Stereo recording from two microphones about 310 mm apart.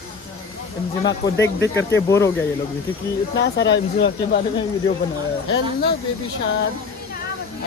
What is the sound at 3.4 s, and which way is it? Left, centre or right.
Speech, left.